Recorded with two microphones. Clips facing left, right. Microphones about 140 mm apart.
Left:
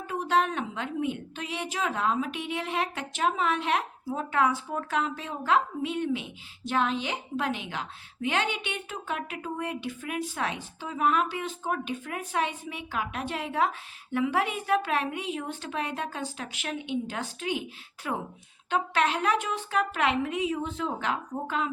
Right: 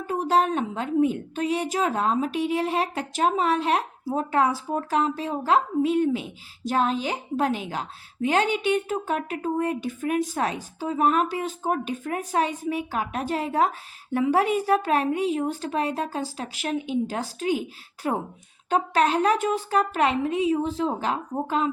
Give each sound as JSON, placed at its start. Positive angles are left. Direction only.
{"t": 0.1, "sound": "a woman's voice", "side_deg": -35}